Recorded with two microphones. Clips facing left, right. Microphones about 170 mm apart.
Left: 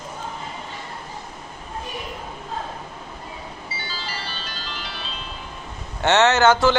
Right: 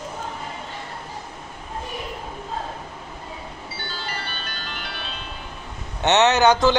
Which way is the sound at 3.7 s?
60° right (ahead or behind).